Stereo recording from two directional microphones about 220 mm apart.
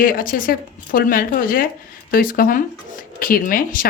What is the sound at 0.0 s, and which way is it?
Speech, 40° left (ahead or behind).